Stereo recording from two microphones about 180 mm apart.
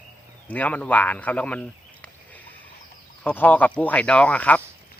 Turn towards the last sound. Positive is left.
turn(degrees=10)  # may be behind; listen again after turning